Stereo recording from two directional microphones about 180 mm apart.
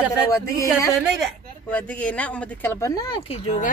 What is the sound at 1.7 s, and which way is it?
Speech, 5° left (ahead or behind).